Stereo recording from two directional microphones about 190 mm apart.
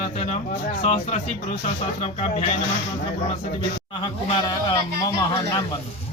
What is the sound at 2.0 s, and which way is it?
Speech, 35° left (ahead or behind).